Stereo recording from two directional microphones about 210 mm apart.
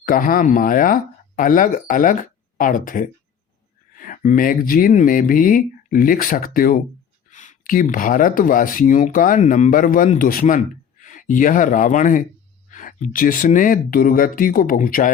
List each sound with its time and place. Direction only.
0.0 s speech: 40° left (ahead or behind)